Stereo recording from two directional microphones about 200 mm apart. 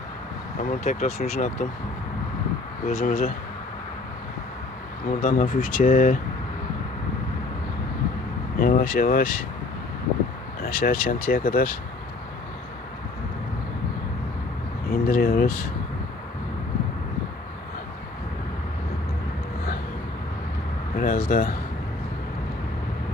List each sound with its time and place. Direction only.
0.6 s speech: 40° left (ahead or behind)
2.8 s speech: 40° left (ahead or behind)
5.2 s speech: 40° left (ahead or behind)
8.5 s speech: 45° left (ahead or behind)
10.6 s speech: 45° left (ahead or behind)
14.8 s speech: 45° left (ahead or behind)
20.9 s speech: 45° left (ahead or behind)